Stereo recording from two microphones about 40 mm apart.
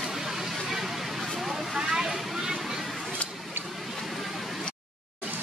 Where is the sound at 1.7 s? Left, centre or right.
Centre.